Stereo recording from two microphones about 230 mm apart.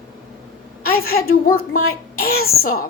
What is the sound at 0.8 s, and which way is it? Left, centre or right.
Speech, left.